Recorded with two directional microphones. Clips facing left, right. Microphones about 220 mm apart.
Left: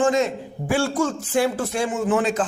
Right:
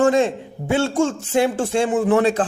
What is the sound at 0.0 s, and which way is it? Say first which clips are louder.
A man's voice: right 3 dB; 30° right (ahead or behind).